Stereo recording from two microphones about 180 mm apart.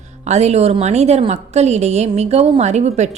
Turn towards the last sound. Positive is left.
turn(degrees=-40)  # may be behind; listen again after turning